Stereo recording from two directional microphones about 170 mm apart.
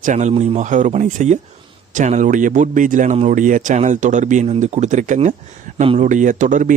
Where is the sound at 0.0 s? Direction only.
45° right (ahead or behind).